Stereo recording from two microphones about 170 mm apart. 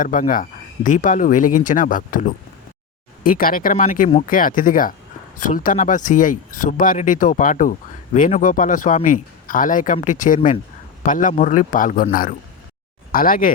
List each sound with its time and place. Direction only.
0.0 s speech: 50° left (ahead or behind)
13.1 s speech: 55° left (ahead or behind)